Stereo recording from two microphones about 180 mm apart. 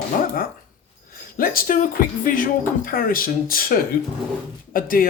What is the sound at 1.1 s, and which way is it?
Speech, 50° left (ahead or behind).